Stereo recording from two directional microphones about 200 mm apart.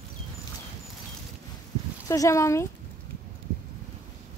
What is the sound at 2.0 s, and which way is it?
Speech, 15° left (ahead or behind).